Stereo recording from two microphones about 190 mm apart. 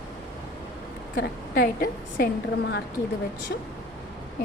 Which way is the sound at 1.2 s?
50° left (ahead or behind).